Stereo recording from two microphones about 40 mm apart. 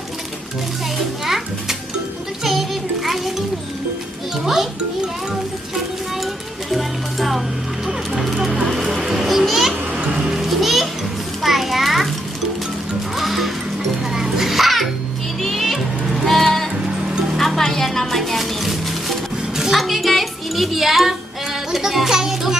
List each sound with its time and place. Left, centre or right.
1.2 s speech: centre
6.7 s speech: centre
8.9 s children playing: centre
9.9 s music: right
10.4 s children playing: centre
11.4 s a sound: centre
13.1 s music: centre
21.7 s speech: centre